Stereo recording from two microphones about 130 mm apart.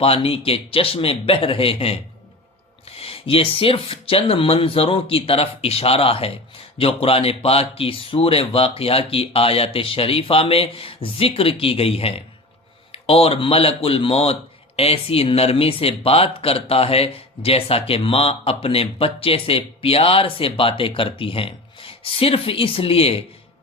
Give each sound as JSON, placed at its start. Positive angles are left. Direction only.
{"t": 0.0, "sound": "speech", "side_deg": 45}